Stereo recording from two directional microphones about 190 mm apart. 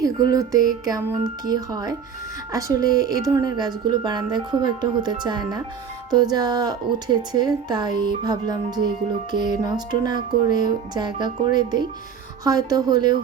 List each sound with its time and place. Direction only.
0.3 s speech: 20° right (ahead or behind)